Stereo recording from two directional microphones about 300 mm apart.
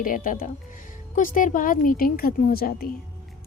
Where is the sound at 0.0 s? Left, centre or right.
Left.